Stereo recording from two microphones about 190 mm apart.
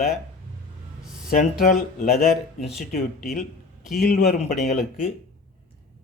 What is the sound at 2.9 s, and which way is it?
Speech, 50° left (ahead or behind).